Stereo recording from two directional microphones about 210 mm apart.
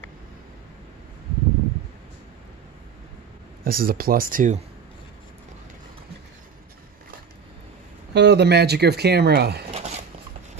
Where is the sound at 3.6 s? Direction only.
45° right (ahead or behind).